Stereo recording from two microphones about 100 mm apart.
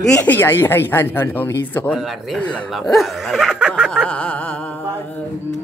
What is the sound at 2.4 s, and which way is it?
Speech, 15° left (ahead or behind).